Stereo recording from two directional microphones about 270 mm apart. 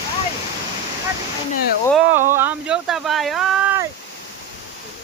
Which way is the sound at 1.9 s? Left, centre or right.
Centre.